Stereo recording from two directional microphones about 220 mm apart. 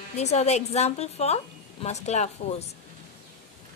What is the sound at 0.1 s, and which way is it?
A woman's voice, 30° left (ahead or behind).